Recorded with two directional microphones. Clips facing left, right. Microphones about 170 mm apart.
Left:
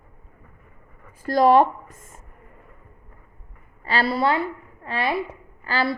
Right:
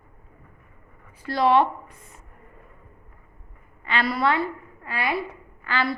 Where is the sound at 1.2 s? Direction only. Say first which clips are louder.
Left 4 dB; 45° left (ahead or behind).